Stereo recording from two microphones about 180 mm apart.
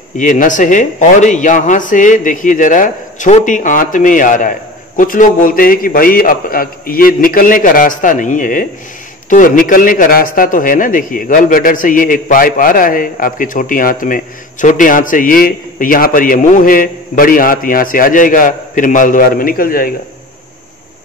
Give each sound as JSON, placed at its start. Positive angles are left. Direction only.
{"t": 0.2, "sound": "a man's voice", "side_deg": 45}